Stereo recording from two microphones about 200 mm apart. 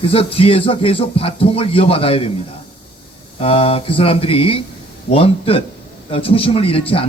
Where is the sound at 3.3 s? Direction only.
30° left (ahead or behind).